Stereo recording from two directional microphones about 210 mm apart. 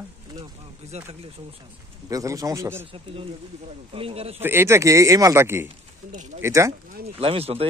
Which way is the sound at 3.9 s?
25° right (ahead or behind).